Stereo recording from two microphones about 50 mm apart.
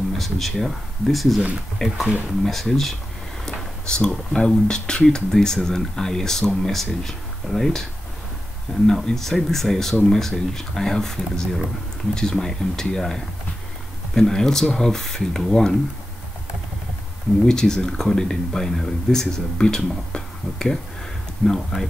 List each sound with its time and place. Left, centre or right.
0.2 s speech: centre
3.4 s a sound: centre
4.4 s speech: centre
8.8 s speech: centre
17.5 s speech: centre
21.4 s speech: centre